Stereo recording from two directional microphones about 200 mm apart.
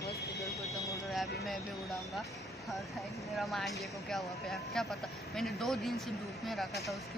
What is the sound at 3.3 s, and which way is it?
Speech, centre (ahead or behind).